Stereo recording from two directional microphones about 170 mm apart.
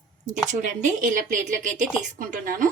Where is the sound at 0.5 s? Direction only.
45° right (ahead or behind).